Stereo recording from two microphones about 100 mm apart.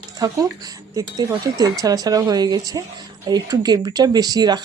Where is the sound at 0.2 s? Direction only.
40° right (ahead or behind).